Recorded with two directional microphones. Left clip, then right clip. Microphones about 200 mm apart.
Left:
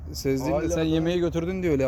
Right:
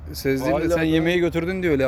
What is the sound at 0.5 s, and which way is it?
Speech, 45° right (ahead or behind).